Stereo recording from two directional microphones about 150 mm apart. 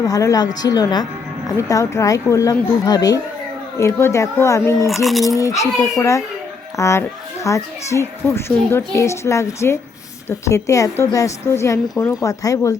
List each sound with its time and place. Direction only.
0.0 s a woman's voice: 20° left (ahead or behind)
5.0 s speech: centre (ahead or behind)
5.4 s a woman's voice: 20° left (ahead or behind)